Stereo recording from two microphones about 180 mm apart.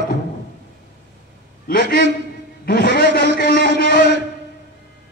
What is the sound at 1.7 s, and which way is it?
Speech, 55° left (ahead or behind).